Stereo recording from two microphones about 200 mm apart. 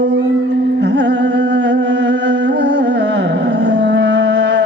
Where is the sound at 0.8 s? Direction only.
60° right (ahead or behind).